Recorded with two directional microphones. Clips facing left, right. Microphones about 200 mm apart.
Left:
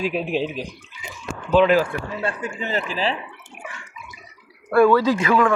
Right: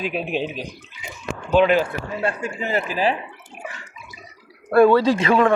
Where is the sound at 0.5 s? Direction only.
40° right (ahead or behind).